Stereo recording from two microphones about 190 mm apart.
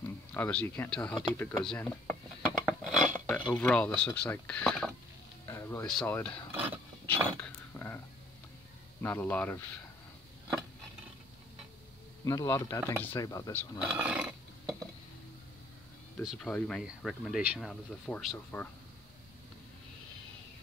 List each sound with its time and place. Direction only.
0.0 s speech: 10° left (ahead or behind)
2.6 s dishes: centre (ahead or behind)
3.3 s speech: 5° left (ahead or behind)
5.5 s music: 15° left (ahead or behind)
5.9 s speech: 5° left (ahead or behind)
7.1 s a sound: 10° left (ahead or behind)
9.0 s speech: 10° left (ahead or behind)
12.3 s speech: 15° left (ahead or behind)
13.7 s burping: 5° right (ahead or behind)
16.3 s speech: 5° left (ahead or behind)